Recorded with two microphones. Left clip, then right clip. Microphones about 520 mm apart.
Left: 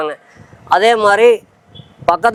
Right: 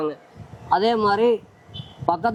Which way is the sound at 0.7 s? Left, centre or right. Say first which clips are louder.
Left 9 dB; left.